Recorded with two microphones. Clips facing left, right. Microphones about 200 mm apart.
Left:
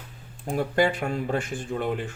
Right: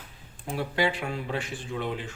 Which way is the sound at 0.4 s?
45° left (ahead or behind).